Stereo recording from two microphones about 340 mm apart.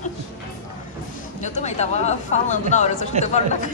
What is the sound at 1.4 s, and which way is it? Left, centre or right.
Speech, left.